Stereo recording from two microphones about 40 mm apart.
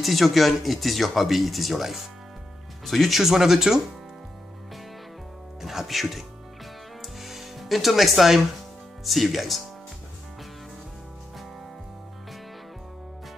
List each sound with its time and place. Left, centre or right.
0.0 s speech: centre
5.6 s speech: centre
7.2 s music: centre
9.0 s speech: centre